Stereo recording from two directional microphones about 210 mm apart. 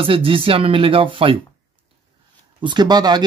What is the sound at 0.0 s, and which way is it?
Speech, 25° right (ahead or behind).